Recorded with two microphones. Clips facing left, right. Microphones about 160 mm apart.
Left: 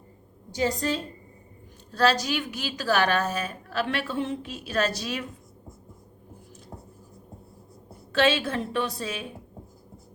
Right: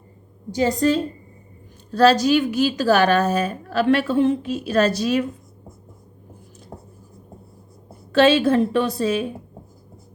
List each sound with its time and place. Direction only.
0.6 s a woman's voice: 50° right (ahead or behind)
2.0 s a woman's voice: 35° right (ahead or behind)
8.1 s a woman's voice: 40° right (ahead or behind)